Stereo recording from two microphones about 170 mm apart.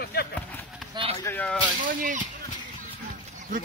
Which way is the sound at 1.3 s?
15° left (ahead or behind).